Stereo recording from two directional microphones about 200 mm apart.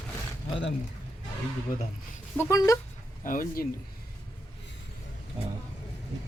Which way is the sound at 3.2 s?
45° left (ahead or behind).